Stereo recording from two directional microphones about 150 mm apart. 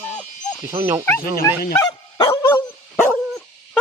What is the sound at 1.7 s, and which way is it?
Dog, 25° left (ahead or behind).